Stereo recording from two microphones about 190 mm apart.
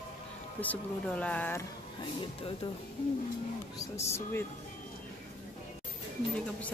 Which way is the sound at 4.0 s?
15° left (ahead or behind).